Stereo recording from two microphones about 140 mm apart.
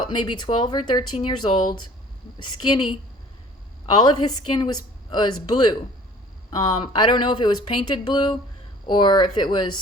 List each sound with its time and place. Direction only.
0.0 s a woman's voice: 30° left (ahead or behind)
3.8 s a woman's voice: 30° left (ahead or behind)
6.9 s a woman's voice: 35° left (ahead or behind)